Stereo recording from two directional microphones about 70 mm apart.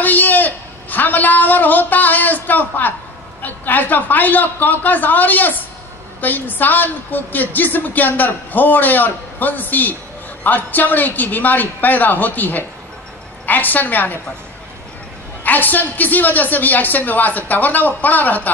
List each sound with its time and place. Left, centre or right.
0.0 s a man's voice: left
15.4 s a woman's voice: left